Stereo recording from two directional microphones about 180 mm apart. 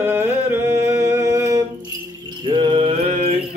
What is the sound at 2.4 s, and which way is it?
Mantra, 25° right (ahead or behind).